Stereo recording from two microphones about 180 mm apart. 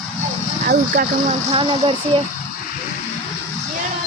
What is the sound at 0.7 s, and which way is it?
Speech, 50° right (ahead or behind).